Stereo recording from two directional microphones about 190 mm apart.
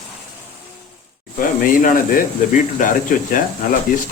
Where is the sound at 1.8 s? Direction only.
45° left (ahead or behind).